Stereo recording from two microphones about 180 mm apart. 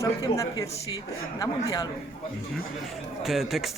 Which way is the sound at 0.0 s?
20° left (ahead or behind).